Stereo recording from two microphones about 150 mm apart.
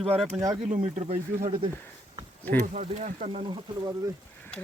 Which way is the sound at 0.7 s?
50° right (ahead or behind).